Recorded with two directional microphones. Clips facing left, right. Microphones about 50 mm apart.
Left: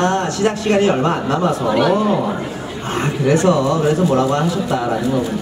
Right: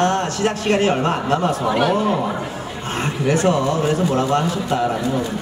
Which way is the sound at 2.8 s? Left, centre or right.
Left.